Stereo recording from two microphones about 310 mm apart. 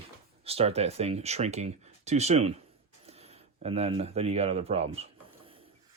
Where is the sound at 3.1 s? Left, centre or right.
Centre.